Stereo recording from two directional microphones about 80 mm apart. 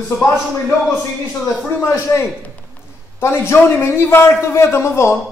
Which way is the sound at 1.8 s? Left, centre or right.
Left.